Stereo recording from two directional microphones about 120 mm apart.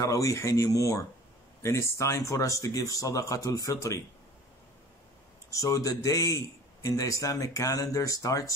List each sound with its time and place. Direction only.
0.0 s a man's voice: 25° left (ahead or behind)
5.5 s a man's voice: 25° left (ahead or behind)